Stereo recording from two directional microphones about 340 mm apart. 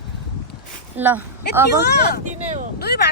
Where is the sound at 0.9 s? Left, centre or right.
Centre.